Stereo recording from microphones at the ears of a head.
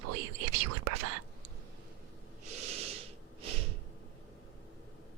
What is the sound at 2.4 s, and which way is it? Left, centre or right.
Snort, right.